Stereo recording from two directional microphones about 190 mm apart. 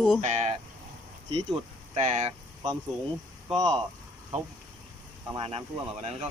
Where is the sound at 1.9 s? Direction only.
35° right (ahead or behind).